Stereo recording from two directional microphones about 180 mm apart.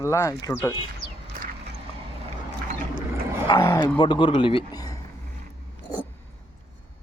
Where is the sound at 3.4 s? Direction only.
20° left (ahead or behind).